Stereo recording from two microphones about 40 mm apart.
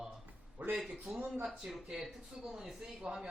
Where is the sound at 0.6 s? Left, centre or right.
Right.